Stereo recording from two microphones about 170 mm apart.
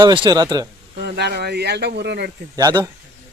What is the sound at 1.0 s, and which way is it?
Speech, 75° right (ahead or behind).